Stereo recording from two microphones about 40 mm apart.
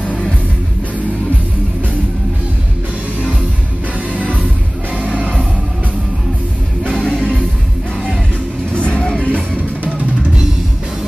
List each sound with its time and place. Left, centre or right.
4.1 s music: left
4.9 s music: right
7.0 s music: left
8.7 s music: left